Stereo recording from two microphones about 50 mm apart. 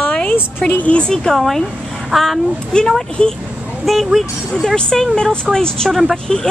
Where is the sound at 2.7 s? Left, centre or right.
Centre.